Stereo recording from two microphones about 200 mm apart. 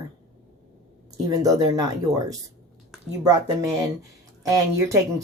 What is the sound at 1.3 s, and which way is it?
Speech, 15° right (ahead or behind).